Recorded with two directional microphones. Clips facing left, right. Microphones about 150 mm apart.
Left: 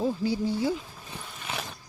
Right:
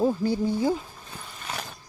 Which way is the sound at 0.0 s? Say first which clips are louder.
Right 3 dB; 55° right (ahead or behind).